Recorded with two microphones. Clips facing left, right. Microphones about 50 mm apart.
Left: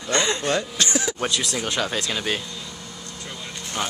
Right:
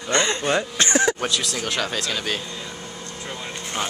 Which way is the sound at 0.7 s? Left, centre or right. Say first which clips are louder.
Right 5 dB; right.